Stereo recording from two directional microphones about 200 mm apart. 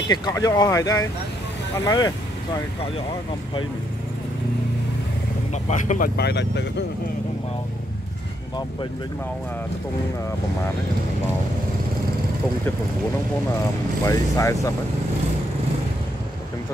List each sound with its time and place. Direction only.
0.1 s speech: 20° left (ahead or behind)
5.5 s speech: 35° left (ahead or behind); by 6.6 s 55° left (ahead or behind)
14.0 s speech: 15° left (ahead or behind)